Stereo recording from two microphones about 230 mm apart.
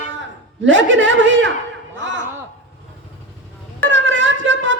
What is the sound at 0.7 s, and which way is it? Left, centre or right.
Speech, right.